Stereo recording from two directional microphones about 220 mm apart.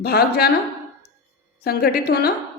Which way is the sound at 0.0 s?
45° left (ahead or behind).